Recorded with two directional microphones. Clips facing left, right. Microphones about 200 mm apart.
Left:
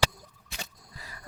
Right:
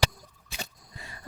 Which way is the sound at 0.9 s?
25° right (ahead or behind).